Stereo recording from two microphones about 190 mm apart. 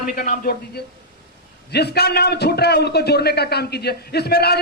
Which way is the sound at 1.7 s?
60° left (ahead or behind).